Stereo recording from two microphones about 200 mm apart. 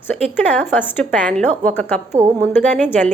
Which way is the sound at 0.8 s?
10° left (ahead or behind).